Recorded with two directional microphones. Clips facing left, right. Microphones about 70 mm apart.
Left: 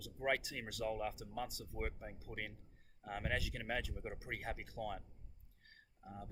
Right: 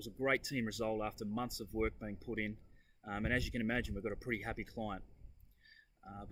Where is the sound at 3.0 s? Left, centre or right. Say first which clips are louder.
Right 3 dB; right.